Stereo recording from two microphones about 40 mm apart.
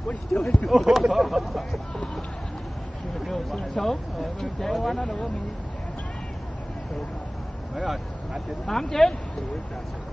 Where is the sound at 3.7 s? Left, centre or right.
Centre.